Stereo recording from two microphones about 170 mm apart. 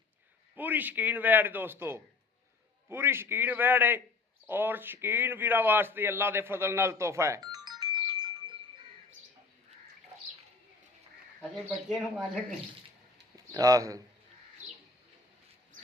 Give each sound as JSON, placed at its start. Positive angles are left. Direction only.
{"t": 0.5, "sound": "a man's voice", "side_deg": -10}
{"t": 11.3, "sound": "speech", "side_deg": 0}
{"t": 13.3, "sound": "speech", "side_deg": -20}